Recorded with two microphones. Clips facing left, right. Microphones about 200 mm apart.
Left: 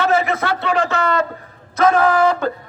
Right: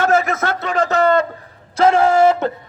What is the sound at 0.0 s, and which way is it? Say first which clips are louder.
A man's voice: right 1 dB; 45° right (ahead or behind).